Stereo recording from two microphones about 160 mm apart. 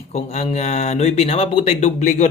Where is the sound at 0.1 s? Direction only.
40° left (ahead or behind).